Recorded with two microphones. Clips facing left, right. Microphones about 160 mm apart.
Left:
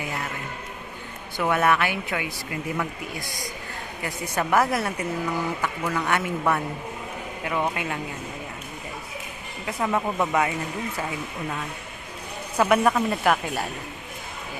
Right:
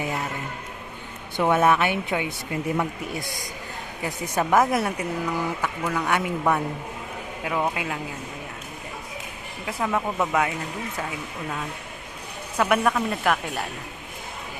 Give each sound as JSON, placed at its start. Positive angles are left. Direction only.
{"t": 1.4, "sound": "speech", "side_deg": -20}
{"t": 4.0, "sound": "a man's voice", "side_deg": -10}
{"t": 4.7, "sound": "a man's voice", "side_deg": 0}
{"t": 9.6, "sound": "speech", "side_deg": 0}
{"t": 12.5, "sound": "speech", "side_deg": 0}